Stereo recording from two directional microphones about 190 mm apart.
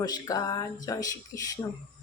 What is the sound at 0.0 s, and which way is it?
Speech, 20° left (ahead or behind).